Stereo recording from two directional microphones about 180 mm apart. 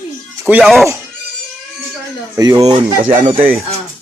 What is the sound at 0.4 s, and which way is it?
Speech, 5° right (ahead or behind).